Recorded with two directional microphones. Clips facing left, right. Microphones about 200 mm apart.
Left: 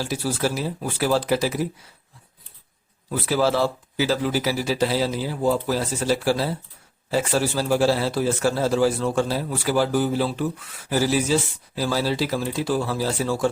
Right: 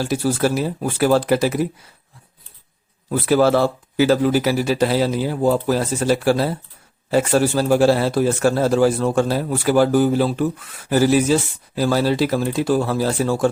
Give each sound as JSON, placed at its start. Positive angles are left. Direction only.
{"t": 0.0, "sound": "speech", "side_deg": -50}
{"t": 3.1, "sound": "speech", "side_deg": -55}